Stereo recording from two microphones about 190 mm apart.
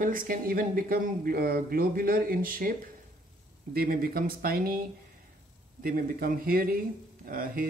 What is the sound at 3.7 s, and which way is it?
Speech, 50° right (ahead or behind).